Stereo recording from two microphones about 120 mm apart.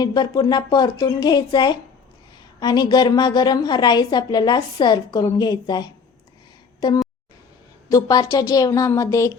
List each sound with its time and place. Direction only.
0.0 s a woman's voice: 35° left (ahead or behind)